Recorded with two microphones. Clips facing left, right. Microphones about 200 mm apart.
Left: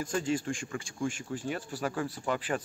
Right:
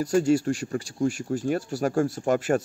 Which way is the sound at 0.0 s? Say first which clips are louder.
Right 10 dB; 40° right (ahead or behind).